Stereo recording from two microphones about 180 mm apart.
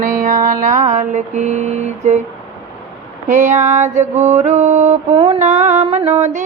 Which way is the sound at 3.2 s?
40° right (ahead or behind).